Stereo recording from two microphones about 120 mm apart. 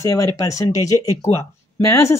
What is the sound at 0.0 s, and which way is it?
Speech, 25° left (ahead or behind).